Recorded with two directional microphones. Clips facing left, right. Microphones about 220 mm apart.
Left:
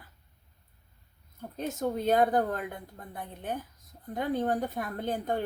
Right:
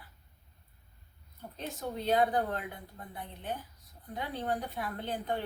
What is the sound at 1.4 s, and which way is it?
Speech, 50° left (ahead or behind).